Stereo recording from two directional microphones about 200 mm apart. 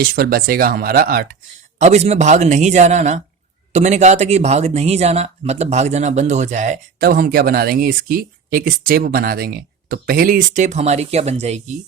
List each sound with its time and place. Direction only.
0.0 s speech: 50° right (ahead or behind)
1.8 s speech: 35° right (ahead or behind)